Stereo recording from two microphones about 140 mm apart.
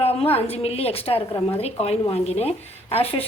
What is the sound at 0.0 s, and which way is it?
A woman's voice, 45° left (ahead or behind).